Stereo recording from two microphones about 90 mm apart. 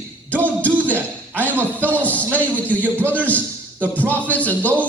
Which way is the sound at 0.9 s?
20° right (ahead or behind).